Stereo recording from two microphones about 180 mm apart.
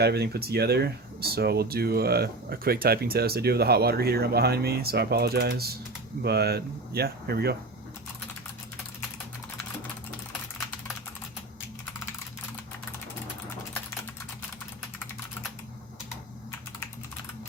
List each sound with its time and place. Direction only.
0.0 s speech: 65° right (ahead or behind)